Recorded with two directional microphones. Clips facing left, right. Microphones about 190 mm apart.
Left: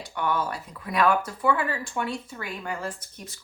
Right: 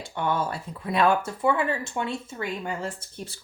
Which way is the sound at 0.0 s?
25° right (ahead or behind).